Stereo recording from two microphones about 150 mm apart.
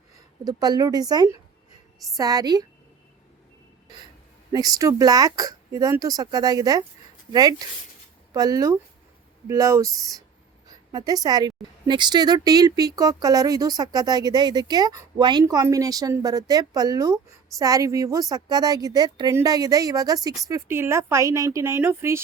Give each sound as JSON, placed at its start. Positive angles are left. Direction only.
{"t": 0.4, "sound": "a woman's voice", "side_deg": -25}
{"t": 4.5, "sound": "a woman's voice", "side_deg": -25}
{"t": 8.3, "sound": "a woman's voice", "side_deg": -25}